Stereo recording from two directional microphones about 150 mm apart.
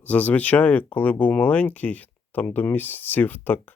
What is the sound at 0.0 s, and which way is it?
Speech, 10° left (ahead or behind).